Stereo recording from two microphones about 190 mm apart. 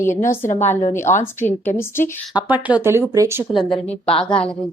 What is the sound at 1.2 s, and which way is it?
Speech, 10° left (ahead or behind).